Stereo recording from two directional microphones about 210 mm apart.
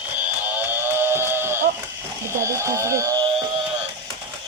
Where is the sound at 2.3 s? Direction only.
15° right (ahead or behind).